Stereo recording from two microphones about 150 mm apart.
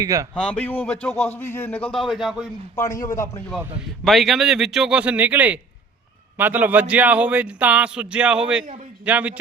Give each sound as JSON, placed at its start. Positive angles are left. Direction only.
{"t": 0.0, "sound": "speech", "side_deg": -20}
{"t": 0.3, "sound": "a man's voice", "side_deg": 10}
{"t": 2.7, "sound": "a man's voice", "side_deg": 20}
{"t": 4.0, "sound": "a man's voice", "side_deg": 0}